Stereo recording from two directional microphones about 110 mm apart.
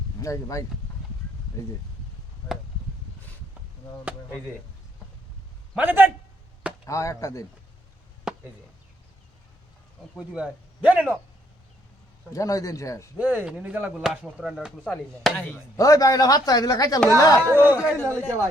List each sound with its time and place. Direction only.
0.2 s speech: 30° left (ahead or behind)
5.7 s speech: 15° right (ahead or behind)
6.8 s speech: 30° left (ahead or behind)
8.3 s chop: 5° right (ahead or behind)
10.2 s speech: 10° right (ahead or behind)
12.3 s speech: 30° left (ahead or behind)
13.1 s speech: 10° right (ahead or behind)
14.8 s speech: 10° left (ahead or behind)
15.8 s speech: 35° left (ahead or behind)
17.5 s speech: 15° right (ahead or behind)
18.0 s speech: 15° left (ahead or behind)